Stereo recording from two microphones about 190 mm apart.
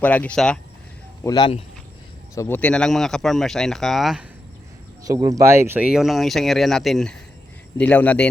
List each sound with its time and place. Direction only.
0.0 s speech: 10° left (ahead or behind)
1.2 s speech: 20° left (ahead or behind)
2.3 s speech: 15° left (ahead or behind)
5.0 s speech: 15° right (ahead or behind); by 8.3 s 5° left (ahead or behind)